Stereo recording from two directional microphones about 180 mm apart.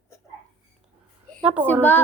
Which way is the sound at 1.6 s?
10° left (ahead or behind).